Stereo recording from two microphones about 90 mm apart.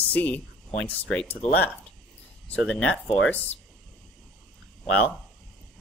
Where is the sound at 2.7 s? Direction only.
10° left (ahead or behind).